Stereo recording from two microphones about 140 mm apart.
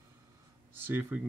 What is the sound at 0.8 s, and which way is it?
Speech, 15° right (ahead or behind).